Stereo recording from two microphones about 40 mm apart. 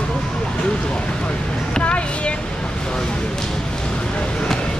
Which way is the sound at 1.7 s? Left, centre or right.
Left.